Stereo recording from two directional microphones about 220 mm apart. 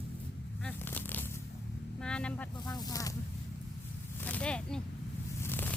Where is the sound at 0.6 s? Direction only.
10° left (ahead or behind).